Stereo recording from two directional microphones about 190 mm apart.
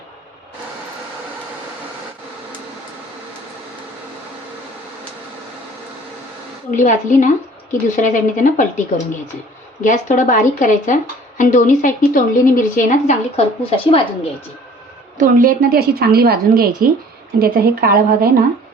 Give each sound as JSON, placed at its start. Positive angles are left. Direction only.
{"t": 6.7, "sound": "a woman's voice", "side_deg": 40}
{"t": 9.8, "sound": "a woman's voice", "side_deg": 40}
{"t": 15.2, "sound": "a woman's voice", "side_deg": -45}